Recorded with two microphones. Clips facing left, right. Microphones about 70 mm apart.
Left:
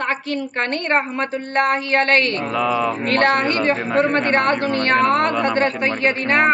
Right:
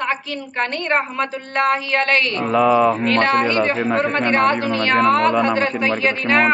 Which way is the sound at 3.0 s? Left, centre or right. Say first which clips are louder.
Even; left.